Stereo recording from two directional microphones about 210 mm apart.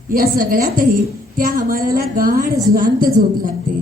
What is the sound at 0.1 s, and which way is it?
A woman's voice, 45° right (ahead or behind).